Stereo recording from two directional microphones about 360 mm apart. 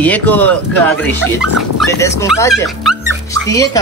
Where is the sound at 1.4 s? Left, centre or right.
Left.